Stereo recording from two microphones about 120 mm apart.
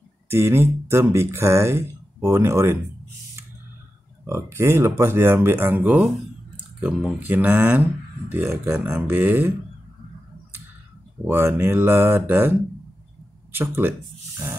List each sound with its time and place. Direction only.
0.3 s speech: 20° right (ahead or behind)
4.2 s speech: 20° right (ahead or behind)
11.2 s speech: 20° right (ahead or behind)
13.5 s a sound: 15° right (ahead or behind)